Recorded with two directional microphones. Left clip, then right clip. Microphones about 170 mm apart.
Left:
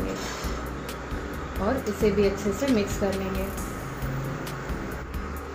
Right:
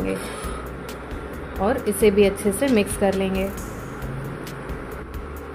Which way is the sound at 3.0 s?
80° right.